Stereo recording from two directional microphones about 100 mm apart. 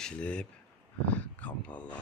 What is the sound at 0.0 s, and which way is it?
Speech, 10° left (ahead or behind).